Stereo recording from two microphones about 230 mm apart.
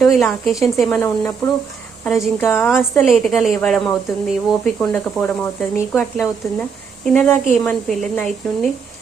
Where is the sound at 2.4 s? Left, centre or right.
Centre.